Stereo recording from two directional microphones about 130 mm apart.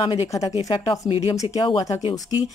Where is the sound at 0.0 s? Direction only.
40° left (ahead or behind).